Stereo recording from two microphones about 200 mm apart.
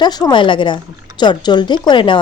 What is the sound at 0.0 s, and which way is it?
Speech, 20° left (ahead or behind).